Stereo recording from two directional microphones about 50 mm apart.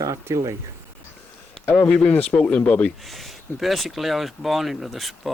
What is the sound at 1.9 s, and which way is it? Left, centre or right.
Speech, left.